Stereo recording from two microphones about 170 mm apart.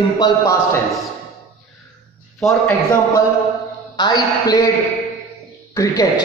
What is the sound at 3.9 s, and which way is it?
Speech, 25° left (ahead or behind).